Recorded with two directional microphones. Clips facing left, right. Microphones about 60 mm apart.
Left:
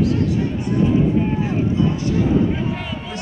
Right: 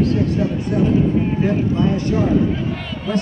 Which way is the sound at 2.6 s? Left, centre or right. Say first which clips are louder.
Even; centre.